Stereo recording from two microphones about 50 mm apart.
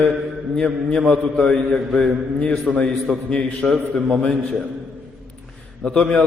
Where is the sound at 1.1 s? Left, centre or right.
Centre.